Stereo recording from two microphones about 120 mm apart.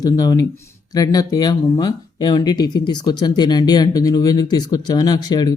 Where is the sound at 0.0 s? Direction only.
30° left (ahead or behind).